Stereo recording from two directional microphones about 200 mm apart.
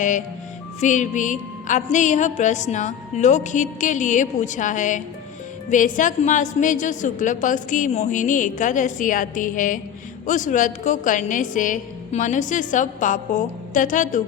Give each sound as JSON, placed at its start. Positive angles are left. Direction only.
{"t": 0.8, "sound": "a woman's voice", "side_deg": 40}